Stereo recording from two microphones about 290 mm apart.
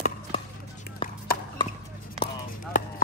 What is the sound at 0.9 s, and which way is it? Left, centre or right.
Chop, left.